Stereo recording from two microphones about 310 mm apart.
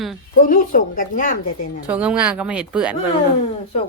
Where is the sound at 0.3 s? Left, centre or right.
Left.